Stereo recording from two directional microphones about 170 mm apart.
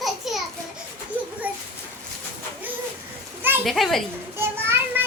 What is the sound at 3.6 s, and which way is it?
Speech, centre (ahead or behind).